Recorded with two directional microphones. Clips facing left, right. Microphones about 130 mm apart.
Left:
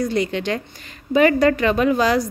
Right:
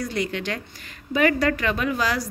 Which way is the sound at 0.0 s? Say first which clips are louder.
Left 6 dB; 25° left (ahead or behind).